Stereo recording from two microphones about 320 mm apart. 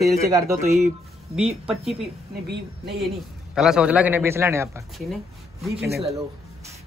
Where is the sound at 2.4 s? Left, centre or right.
Right.